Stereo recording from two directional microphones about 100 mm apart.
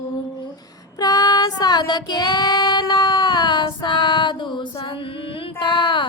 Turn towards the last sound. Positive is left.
turn(degrees=55)  # may be behind; listen again after turning